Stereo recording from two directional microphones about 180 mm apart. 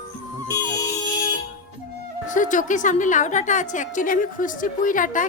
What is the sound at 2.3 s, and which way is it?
A woman's voice, 45° left (ahead or behind).